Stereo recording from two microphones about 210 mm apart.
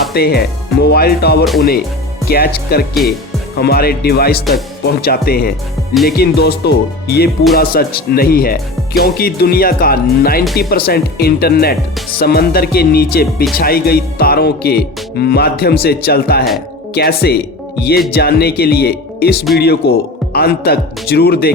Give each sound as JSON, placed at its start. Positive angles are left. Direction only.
{"t": 0.1, "sound": "speech", "side_deg": 50}
{"t": 2.9, "sound": "speech", "side_deg": 0}
{"t": 3.6, "sound": "speech", "side_deg": 45}